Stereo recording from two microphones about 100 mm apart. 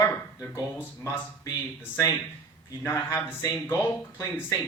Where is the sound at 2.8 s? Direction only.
25° left (ahead or behind).